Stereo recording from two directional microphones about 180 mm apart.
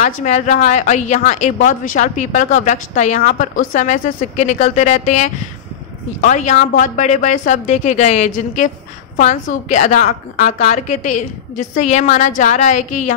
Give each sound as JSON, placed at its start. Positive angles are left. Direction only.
{"t": 0.0, "sound": "a woman's voice", "side_deg": 40}